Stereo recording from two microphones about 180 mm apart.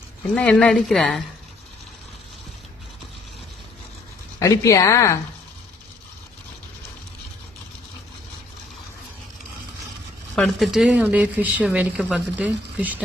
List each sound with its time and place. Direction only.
0.2 s speech: 5° left (ahead or behind)
4.4 s a woman's voice: 20° left (ahead or behind)
10.3 s speech: centre (ahead or behind)